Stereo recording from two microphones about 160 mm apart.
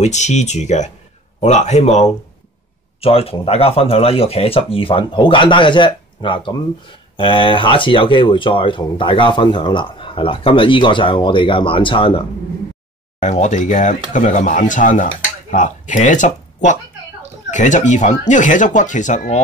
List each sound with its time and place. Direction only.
0.0 s speech: 45° left (ahead or behind)
13.2 s speech: 50° left (ahead or behind)